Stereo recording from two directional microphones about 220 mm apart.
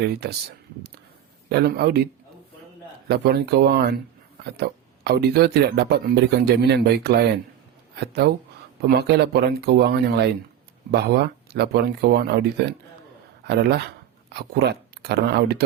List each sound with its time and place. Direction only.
0.0 s speech: 45° right (ahead or behind)
1.5 s speech: 45° right (ahead or behind)
3.1 s speech: 45° right (ahead or behind)